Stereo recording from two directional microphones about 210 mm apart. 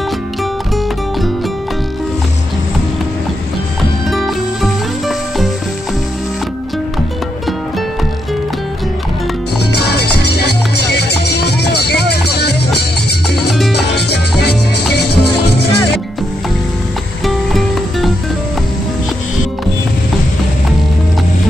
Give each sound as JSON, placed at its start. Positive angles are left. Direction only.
{"t": 4.1, "sound": "music", "side_deg": 0}
{"t": 9.8, "sound": "music", "side_deg": 50}
{"t": 13.9, "sound": "music", "side_deg": 50}
{"t": 17.2, "sound": "music", "side_deg": 0}